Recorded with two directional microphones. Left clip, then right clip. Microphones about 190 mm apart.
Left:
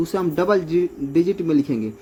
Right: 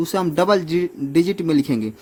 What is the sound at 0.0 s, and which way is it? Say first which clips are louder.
Speech: right 2 dB; 35° right (ahead or behind).